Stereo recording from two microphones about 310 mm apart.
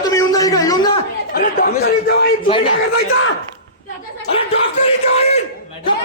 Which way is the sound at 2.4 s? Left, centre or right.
Centre.